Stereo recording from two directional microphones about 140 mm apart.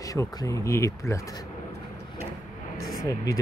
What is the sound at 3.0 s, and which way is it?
Speech, 25° left (ahead or behind).